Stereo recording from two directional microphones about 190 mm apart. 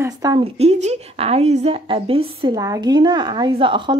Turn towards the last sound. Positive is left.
turn(degrees=-25)  # may be behind; listen again after turning